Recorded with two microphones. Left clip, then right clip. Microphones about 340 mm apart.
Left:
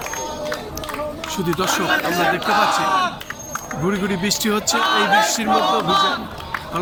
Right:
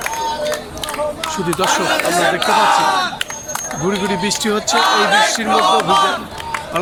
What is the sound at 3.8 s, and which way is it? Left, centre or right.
Speech, centre.